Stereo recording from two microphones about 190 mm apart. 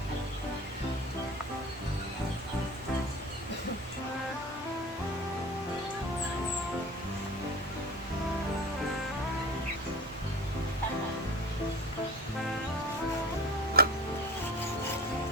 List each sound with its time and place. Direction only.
13.8 s music: 55° right (ahead or behind)